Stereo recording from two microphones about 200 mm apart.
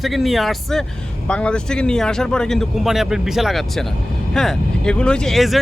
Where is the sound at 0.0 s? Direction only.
Centre (ahead or behind).